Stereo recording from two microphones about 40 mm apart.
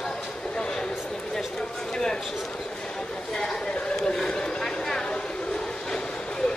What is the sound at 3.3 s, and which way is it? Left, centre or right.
Chatter, centre.